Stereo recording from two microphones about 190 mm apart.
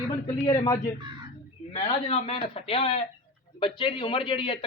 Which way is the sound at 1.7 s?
30° left (ahead or behind).